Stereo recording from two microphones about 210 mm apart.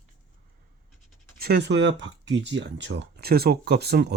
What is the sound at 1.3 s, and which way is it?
Speech, 50° right (ahead or behind).